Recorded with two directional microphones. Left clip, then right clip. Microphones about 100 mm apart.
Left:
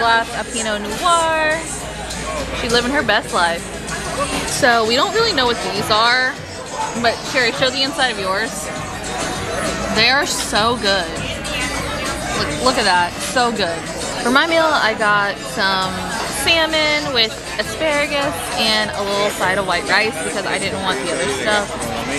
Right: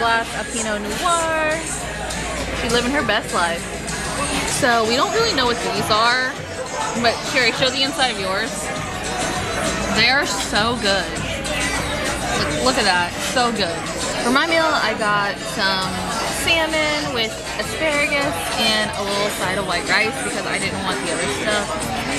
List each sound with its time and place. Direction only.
0.7 s speech: 15° left (ahead or behind)
2.7 s speech: 20° left (ahead or behind)
9.9 s speech: 20° left (ahead or behind)
12.4 s speech: 20° left (ahead or behind)